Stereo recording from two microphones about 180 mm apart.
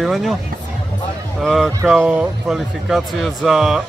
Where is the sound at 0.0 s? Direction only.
Centre (ahead or behind).